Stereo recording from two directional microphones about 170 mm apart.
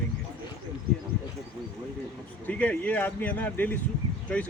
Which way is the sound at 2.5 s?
10° left (ahead or behind).